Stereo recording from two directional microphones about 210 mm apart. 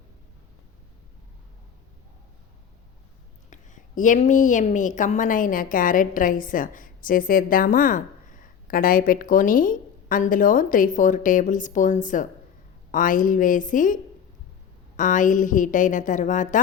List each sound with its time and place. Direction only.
3.5 s a woman's voice: 35° left (ahead or behind)